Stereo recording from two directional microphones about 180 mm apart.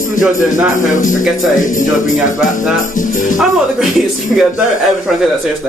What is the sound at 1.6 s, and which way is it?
Music, 45° left (ahead or behind).